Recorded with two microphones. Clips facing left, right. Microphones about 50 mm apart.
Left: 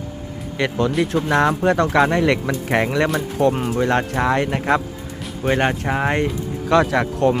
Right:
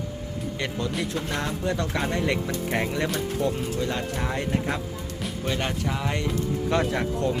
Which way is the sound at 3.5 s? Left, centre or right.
Left.